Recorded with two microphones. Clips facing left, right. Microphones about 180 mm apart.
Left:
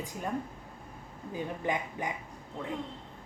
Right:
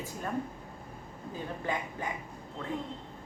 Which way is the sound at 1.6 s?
20° left (ahead or behind).